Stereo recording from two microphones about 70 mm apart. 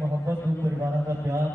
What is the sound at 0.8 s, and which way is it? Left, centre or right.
Speech, right.